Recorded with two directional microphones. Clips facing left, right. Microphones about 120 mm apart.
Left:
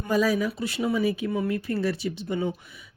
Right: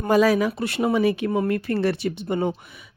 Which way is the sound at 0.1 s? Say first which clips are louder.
Right 5 dB; 75° right (ahead or behind).